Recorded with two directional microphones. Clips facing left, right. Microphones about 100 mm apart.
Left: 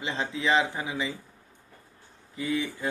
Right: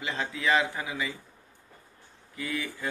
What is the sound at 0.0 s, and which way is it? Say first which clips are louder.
Speech: left 1 dB; 25° left (ahead or behind).